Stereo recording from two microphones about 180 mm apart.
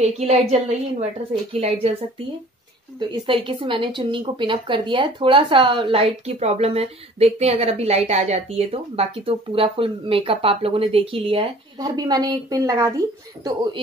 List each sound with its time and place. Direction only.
0.0 s a woman's voice: 35° right (ahead or behind)
3.3 s a woman's voice: 30° right (ahead or behind)